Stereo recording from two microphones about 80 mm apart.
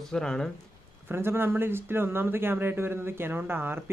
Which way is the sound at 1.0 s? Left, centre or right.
Right.